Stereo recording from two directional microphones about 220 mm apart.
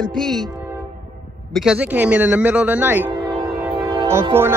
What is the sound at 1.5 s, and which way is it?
Speech, centre (ahead or behind).